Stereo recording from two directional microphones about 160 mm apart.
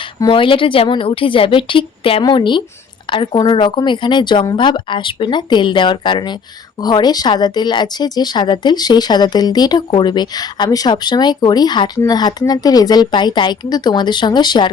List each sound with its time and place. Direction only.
0.2 s a woman's voice: 30° left (ahead or behind)